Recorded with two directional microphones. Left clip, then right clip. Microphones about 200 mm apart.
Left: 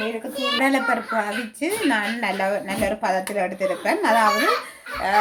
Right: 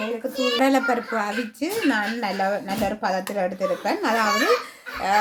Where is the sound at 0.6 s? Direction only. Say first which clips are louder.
Left 1 dB; 25° right (ahead or behind).